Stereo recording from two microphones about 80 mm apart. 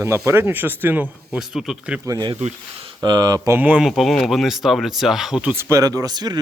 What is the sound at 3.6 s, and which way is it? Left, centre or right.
Speech, centre.